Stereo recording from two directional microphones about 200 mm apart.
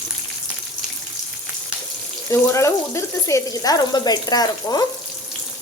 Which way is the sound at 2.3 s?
15° left (ahead or behind).